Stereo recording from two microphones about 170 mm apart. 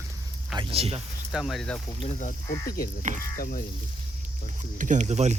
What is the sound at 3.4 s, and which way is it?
Frying, 60° left (ahead or behind).